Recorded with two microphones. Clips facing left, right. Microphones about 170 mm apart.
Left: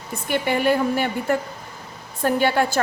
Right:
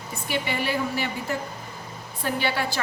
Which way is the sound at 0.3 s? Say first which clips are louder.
Left 7 dB; 50° left (ahead or behind).